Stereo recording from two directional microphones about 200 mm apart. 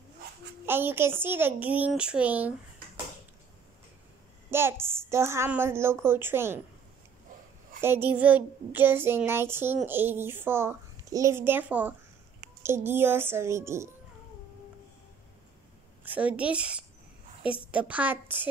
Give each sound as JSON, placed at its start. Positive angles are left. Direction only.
{"t": 0.7, "sound": "a child's voice", "side_deg": -10}
{"t": 4.5, "sound": "a child's voice", "side_deg": -10}
{"t": 7.8, "sound": "a child's voice", "side_deg": -10}
{"t": 16.0, "sound": "a woman's voice", "side_deg": -10}